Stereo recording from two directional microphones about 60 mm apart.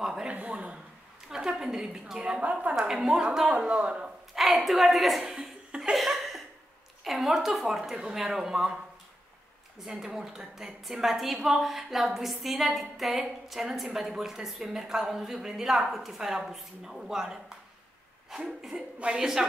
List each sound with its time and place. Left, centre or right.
0.0 s a sound: centre
0.3 s a woman's voice: right
3.4 s speech: centre
4.6 s a woman's voice: centre
5.9 s laughter: centre
7.1 s a woman's voice: centre
9.8 s a woman's voice: centre